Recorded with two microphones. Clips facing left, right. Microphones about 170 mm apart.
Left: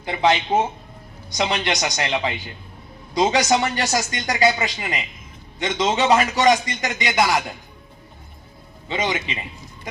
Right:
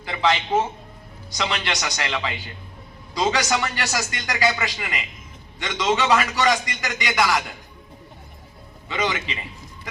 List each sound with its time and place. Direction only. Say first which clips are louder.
0.1 s speech: left 2 dB; 35° left (ahead or behind)
8.9 s speech: left 1 dB; 35° left (ahead or behind)